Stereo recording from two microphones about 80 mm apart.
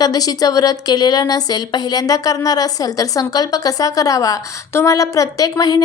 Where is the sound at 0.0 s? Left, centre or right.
Left.